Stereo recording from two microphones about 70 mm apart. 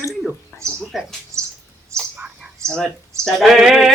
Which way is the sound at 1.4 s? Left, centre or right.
Right.